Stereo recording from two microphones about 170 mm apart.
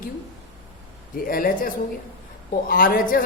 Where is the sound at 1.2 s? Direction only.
55° left (ahead or behind).